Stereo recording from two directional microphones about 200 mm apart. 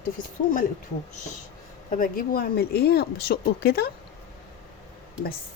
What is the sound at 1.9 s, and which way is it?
Speech, 45° left (ahead or behind).